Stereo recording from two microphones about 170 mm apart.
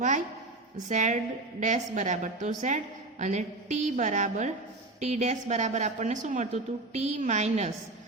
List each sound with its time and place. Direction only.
0.9 s a woman's voice: 45° right (ahead or behind)